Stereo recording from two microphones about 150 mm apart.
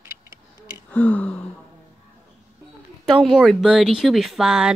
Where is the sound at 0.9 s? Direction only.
10° left (ahead or behind).